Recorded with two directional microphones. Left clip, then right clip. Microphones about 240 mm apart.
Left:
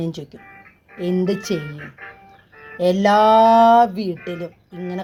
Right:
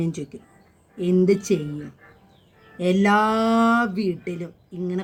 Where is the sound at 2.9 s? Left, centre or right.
Centre.